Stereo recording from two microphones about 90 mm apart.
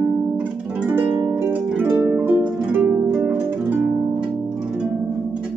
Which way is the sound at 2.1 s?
25° right (ahead or behind).